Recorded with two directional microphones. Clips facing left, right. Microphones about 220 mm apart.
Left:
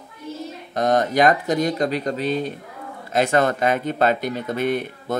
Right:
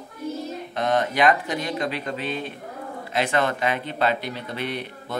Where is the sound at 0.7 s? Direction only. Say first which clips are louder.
Left 4 dB; 40° left (ahead or behind).